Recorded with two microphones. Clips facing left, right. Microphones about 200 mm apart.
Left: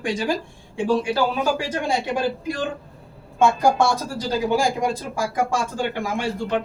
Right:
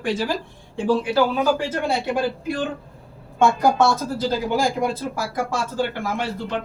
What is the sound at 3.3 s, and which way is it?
Speech, 10° left (ahead or behind).